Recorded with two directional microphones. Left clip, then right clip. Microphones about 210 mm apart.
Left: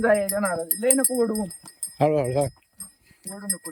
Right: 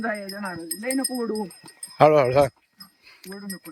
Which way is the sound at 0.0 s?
35° left (ahead or behind).